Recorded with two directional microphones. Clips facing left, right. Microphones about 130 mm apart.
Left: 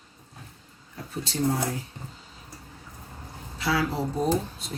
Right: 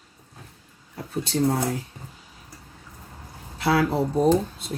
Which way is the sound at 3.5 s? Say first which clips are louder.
Right 5 dB; 55° right (ahead or behind).